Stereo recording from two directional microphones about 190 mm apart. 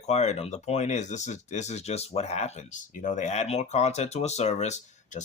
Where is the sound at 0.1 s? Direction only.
35° left (ahead or behind).